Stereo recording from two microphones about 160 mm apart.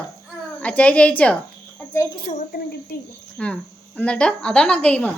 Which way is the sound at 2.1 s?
35° left (ahead or behind).